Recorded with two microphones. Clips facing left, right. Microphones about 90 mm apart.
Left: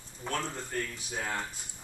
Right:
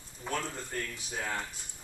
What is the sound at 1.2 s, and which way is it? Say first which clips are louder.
Speech: left 1 dB; 15° left (ahead or behind).